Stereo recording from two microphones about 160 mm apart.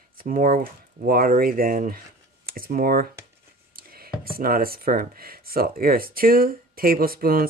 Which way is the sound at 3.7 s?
65° right (ahead or behind).